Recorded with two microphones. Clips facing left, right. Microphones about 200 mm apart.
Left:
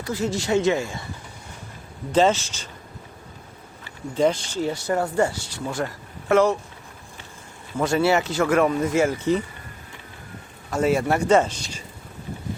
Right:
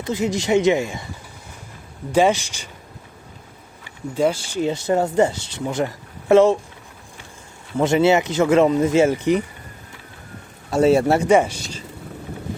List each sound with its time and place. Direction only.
0.0 s speech: 20° right (ahead or behind)
2.1 s speech: 15° right (ahead or behind)
3.8 s speech: 10° right (ahead or behind); by 6.6 s 25° right (ahead or behind)
7.8 s speech: 20° right (ahead or behind)
10.7 s speech: 30° right (ahead or behind)
11.3 s speech: 10° right (ahead or behind)